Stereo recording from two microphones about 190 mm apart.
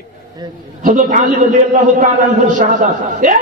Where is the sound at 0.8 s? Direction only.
45° right (ahead or behind).